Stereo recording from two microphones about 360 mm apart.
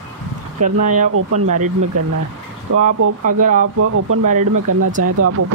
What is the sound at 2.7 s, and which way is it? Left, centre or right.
Speech, right.